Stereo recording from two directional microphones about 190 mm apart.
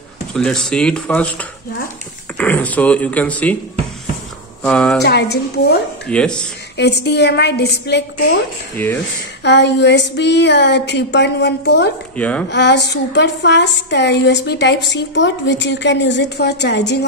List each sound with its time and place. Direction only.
0.3 s speech: 5° left (ahead or behind)
4.6 s speech: 5° left (ahead or behind)
5.0 s speech: 60° left (ahead or behind)
6.0 s speech: 5° left (ahead or behind)
6.8 s speech: 60° left (ahead or behind)
8.7 s speech: 10° left (ahead or behind)
9.4 s speech: 65° left (ahead or behind)
12.2 s speech: 5° left (ahead or behind)
12.4 s a woman's voice: 65° left (ahead or behind)